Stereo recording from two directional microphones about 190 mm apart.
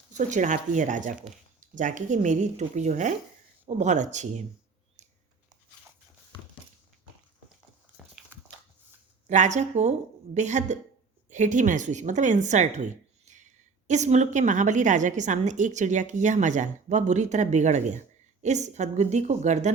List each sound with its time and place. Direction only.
0.1 s a woman's voice: 40° right (ahead or behind)
5.0 s typing: 40° right (ahead or behind)
9.2 s a woman's voice: 40° right (ahead or behind)